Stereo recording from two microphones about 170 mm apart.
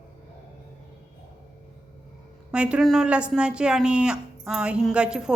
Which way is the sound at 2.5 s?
5° right (ahead or behind).